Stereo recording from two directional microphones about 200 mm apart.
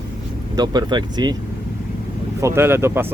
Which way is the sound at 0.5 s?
20° right (ahead or behind).